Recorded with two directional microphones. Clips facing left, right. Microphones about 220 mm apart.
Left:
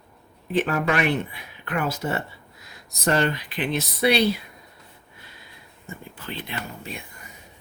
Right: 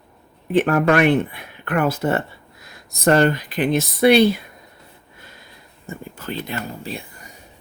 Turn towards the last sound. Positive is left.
turn(degrees=-35)  # may be behind; listen again after turning